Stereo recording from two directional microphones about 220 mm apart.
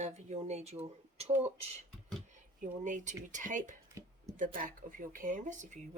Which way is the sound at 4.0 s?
15° right (ahead or behind).